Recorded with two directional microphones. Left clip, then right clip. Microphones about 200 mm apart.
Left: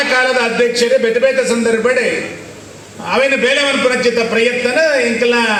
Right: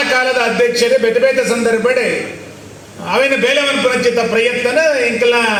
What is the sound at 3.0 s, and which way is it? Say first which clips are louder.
A man's voice: even; 20° right (ahead or behind).